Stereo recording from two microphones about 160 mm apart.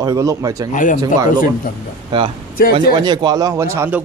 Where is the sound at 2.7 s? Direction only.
25° right (ahead or behind).